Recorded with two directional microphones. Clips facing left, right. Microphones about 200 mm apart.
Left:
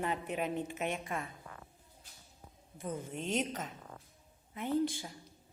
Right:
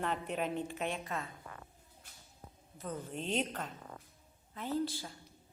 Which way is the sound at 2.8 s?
10° left (ahead or behind).